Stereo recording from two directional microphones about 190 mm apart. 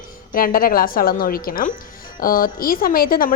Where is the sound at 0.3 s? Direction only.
50° left (ahead or behind).